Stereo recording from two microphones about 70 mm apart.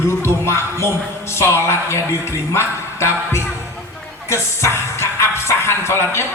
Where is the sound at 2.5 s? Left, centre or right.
Left.